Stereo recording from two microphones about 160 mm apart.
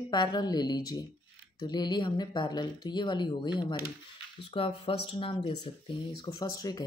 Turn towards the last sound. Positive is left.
turn(degrees=25)  # may be behind; listen again after turning